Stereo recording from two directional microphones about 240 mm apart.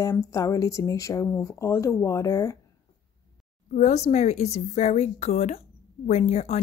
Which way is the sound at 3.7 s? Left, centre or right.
Left.